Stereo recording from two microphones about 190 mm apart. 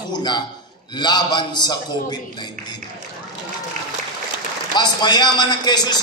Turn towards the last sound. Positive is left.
turn(degrees=20)  # may be behind; listen again after turning